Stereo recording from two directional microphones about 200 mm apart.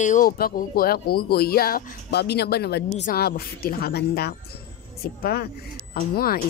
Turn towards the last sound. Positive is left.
turn(degrees=50)  # may be behind; listen again after turning